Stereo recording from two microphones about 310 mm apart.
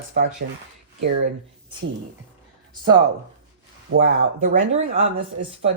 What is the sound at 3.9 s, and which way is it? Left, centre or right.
Speech, right.